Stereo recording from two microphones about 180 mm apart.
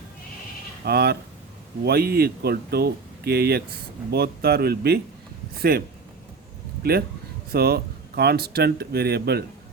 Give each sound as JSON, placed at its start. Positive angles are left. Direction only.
{"t": 0.9, "sound": "speech", "side_deg": -60}
{"t": 6.8, "sound": "speech", "side_deg": -60}